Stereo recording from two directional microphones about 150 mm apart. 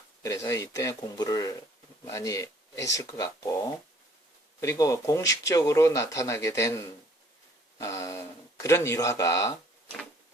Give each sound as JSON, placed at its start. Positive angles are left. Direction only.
{"t": 0.2, "sound": "speech", "side_deg": 20}
{"t": 4.6, "sound": "speech", "side_deg": 20}